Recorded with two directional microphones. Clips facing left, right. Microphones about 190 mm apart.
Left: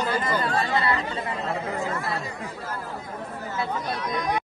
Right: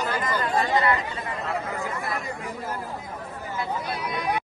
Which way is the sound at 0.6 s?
15° right (ahead or behind).